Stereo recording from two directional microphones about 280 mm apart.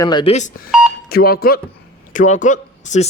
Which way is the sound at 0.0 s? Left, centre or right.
Centre.